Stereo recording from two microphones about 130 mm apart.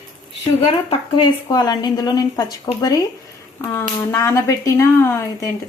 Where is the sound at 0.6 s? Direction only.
45° left (ahead or behind).